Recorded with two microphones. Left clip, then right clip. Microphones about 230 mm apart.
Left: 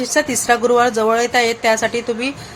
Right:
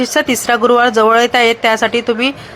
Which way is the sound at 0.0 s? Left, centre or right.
Centre.